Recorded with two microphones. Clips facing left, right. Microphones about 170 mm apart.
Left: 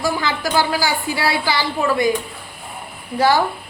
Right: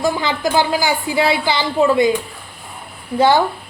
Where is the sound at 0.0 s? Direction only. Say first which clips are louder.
Right 3 dB; 20° right (ahead or behind).